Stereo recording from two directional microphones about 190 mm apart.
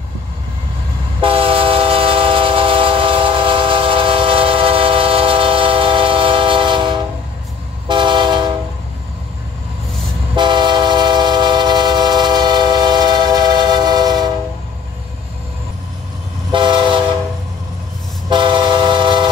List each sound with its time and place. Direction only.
1.2 s train: 30° right (ahead or behind)
10.3 s train: 25° right (ahead or behind)
16.5 s train: 25° right (ahead or behind)
18.3 s vehicle: 25° right (ahead or behind)